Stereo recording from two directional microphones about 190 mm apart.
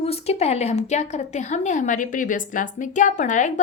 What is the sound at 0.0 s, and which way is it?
A woman's voice, 30° left (ahead or behind).